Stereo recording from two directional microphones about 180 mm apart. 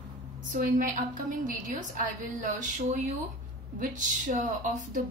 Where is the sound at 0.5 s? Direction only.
50° right (ahead or behind).